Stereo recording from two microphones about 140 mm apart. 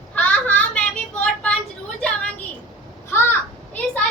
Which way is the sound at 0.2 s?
10° left (ahead or behind).